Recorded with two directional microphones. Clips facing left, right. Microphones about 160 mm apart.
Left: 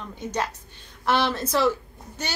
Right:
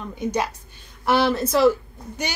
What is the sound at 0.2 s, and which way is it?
A woman's voice, 10° right (ahead or behind).